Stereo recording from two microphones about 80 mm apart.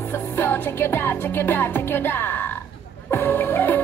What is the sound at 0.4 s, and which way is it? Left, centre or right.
Music, left.